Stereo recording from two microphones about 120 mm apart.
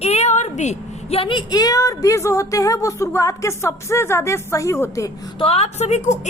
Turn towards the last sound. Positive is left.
turn(degrees=75)  # may be behind; listen again after turning